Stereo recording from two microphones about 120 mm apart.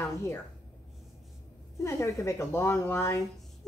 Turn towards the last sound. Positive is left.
turn(degrees=20)  # may be behind; listen again after turning